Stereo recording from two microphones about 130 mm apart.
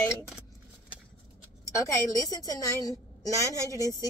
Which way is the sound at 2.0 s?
25° left (ahead or behind).